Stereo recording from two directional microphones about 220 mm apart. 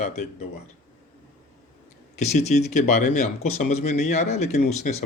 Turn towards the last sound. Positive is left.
turn(degrees=30)  # may be behind; listen again after turning